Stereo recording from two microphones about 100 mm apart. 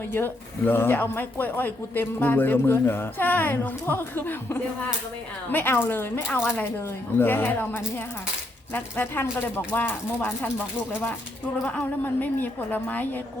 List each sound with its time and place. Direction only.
0.1 s speech: 20° left (ahead or behind)
11.6 s a woman's voice: 20° left (ahead or behind)